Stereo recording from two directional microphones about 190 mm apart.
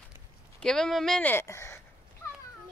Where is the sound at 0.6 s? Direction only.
5° left (ahead or behind).